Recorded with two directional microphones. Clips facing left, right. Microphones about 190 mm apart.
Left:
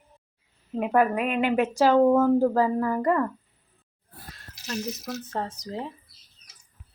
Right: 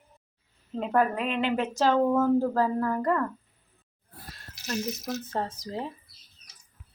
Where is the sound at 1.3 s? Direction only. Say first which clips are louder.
Left 4 dB; 50° left (ahead or behind).